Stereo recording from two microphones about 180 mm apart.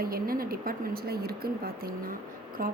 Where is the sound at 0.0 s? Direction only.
55° right (ahead or behind).